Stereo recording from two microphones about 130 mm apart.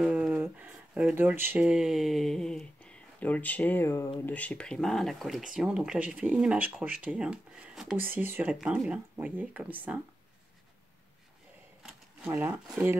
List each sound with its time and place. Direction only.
0.0 s speech: 10° right (ahead or behind)
8.0 s speech: 15° right (ahead or behind)
12.3 s speech: 20° right (ahead or behind)